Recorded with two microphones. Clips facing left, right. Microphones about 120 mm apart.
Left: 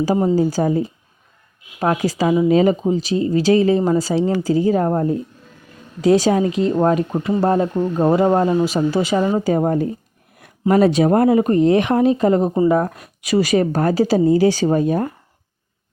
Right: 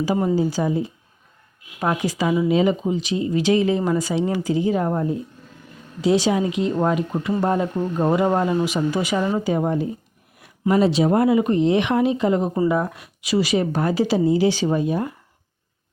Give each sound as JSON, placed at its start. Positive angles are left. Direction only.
{"t": 0.3, "sound": "speech", "side_deg": 45}